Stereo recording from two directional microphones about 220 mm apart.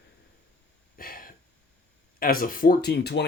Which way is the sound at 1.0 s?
40° left (ahead or behind).